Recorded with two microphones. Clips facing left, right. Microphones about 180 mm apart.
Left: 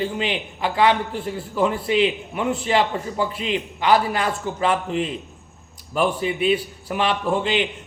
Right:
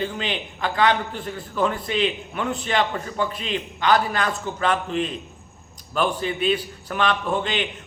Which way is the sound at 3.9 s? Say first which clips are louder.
Left 2 dB; 25° left (ahead or behind).